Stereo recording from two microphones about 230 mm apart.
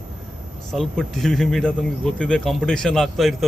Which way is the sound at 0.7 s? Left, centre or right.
Centre.